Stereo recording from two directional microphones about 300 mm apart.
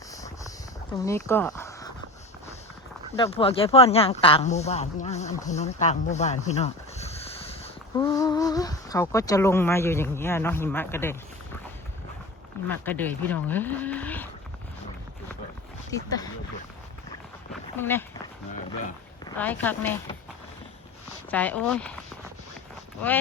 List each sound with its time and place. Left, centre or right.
1.0 s speech: centre
3.2 s speech: centre
12.6 s speech: centre
15.9 s speech: centre
17.5 s a sound: centre
19.2 s speech: centre
21.2 s speech: centre